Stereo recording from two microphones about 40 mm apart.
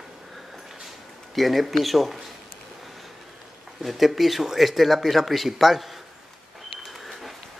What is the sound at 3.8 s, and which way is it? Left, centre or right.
Speech, centre.